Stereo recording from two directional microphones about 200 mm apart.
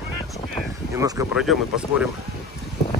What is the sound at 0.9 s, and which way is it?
Speech, 15° right (ahead or behind).